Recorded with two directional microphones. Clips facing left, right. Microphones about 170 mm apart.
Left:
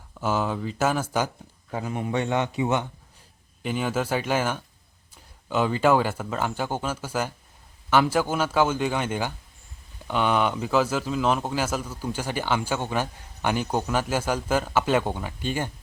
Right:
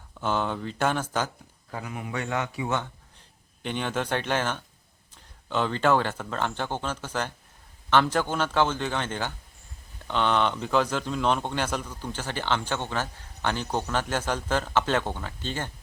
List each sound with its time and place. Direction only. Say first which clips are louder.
0.1 s speech: left 2 dB; 5° left (ahead or behind)
1.7 s a man's voice: left 6 dB; 30° left (ahead or behind)
3.6 s a man's voice: left 3 dB; 5° left (ahead or behind)